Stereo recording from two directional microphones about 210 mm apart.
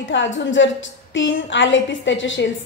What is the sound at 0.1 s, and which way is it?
A woman's voice, 60° left (ahead or behind).